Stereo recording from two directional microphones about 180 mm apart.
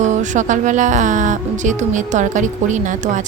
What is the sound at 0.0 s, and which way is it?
Speech, 40° right (ahead or behind).